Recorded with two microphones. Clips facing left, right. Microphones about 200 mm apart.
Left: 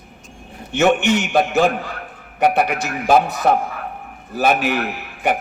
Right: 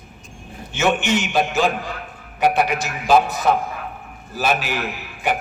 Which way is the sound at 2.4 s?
60° left (ahead or behind).